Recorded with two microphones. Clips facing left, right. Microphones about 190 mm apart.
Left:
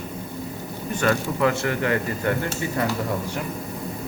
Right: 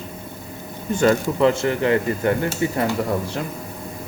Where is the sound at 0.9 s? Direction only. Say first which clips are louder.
Right 5 dB; 25° right (ahead or behind).